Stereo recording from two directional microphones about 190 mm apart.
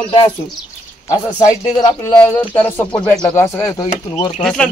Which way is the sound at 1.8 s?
15° left (ahead or behind).